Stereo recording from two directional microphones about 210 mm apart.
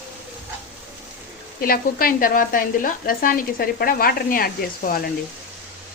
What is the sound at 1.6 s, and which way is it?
Speech, 45° left (ahead or behind).